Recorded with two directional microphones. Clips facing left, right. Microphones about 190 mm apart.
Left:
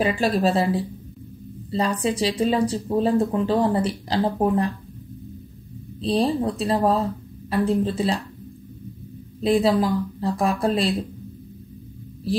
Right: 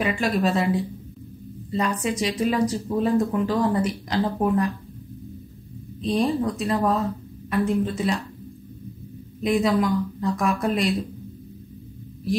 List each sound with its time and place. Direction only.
0.0 s speech: 35° left (ahead or behind)
5.9 s speech: 30° left (ahead or behind)
9.4 s speech: 30° left (ahead or behind)